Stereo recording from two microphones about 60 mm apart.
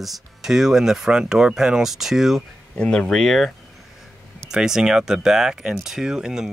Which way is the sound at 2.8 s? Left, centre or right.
Centre.